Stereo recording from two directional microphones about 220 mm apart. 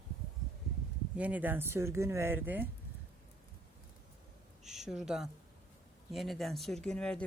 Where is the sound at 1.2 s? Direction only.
5° right (ahead or behind).